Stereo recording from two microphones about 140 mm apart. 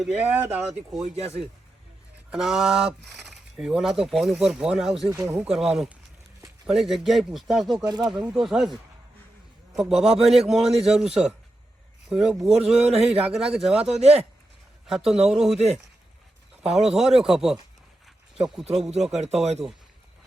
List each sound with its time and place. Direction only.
0.0 s speech: 5° right (ahead or behind)
1.1 s speech: 50° right (ahead or behind)
2.3 s speech: 5° right (ahead or behind)
9.7 s speech: centre (ahead or behind)
12.8 s speech: 50° right (ahead or behind)
13.1 s speech: 5° right (ahead or behind)
14.0 s speech: 50° right (ahead or behind)
14.8 s speech: 5° right (ahead or behind)
16.7 s speech: 5° right (ahead or behind)
19.1 s speech: 50° right (ahead or behind)